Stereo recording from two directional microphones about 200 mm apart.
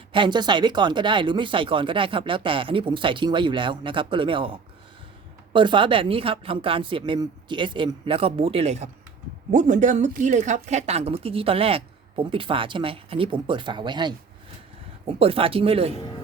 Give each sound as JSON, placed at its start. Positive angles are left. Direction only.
{"t": 0.1, "sound": "speech", "side_deg": -25}
{"t": 5.5, "sound": "speech", "side_deg": -25}